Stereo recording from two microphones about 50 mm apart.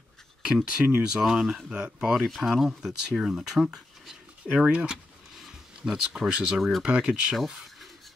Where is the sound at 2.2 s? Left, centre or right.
Centre; by 4.9 s right.